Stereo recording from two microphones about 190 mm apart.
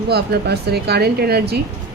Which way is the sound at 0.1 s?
60° right (ahead or behind).